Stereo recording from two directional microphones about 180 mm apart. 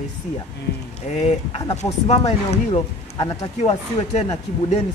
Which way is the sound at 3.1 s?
20° left (ahead or behind).